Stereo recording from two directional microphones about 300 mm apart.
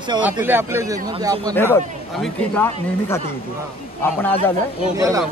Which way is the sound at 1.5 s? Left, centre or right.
Centre.